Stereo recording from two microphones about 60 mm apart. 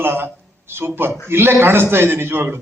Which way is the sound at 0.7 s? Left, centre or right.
Right.